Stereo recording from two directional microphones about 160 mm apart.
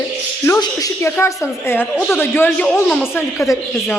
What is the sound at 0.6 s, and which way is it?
A woman's voice, 20° left (ahead or behind).